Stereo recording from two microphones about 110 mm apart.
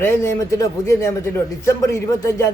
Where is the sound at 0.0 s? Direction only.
20° left (ahead or behind).